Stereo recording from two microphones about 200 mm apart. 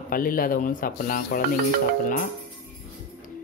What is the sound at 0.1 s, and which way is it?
Speech, 45° left (ahead or behind).